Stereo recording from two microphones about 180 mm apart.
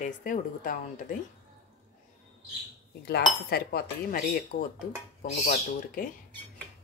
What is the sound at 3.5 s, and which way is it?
Speech, 60° left (ahead or behind).